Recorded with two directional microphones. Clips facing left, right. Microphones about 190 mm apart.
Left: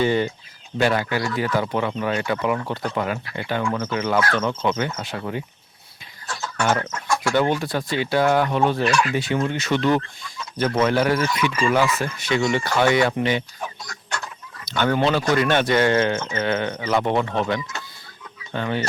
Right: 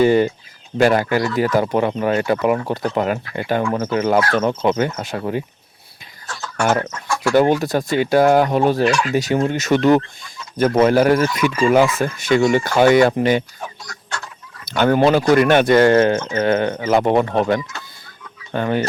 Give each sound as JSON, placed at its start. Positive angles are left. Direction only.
{"t": 0.0, "sound": "speech", "side_deg": -45}
{"t": 6.6, "sound": "speech", "side_deg": -45}
{"t": 14.7, "sound": "speech", "side_deg": -45}